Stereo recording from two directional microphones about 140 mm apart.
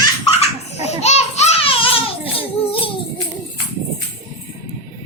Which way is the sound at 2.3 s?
40° left (ahead or behind).